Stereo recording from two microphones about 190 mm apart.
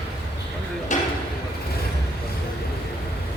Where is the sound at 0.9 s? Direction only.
40° left (ahead or behind).